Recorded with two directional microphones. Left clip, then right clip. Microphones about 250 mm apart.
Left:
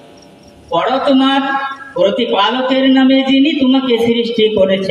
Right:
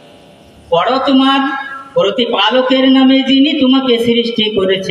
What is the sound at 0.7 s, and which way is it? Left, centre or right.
A man's voice, right.